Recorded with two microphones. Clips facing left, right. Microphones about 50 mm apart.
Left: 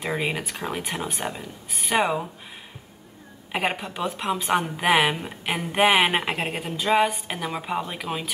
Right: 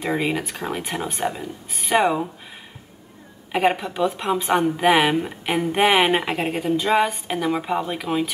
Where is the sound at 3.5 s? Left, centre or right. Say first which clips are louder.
Right 6 dB; centre.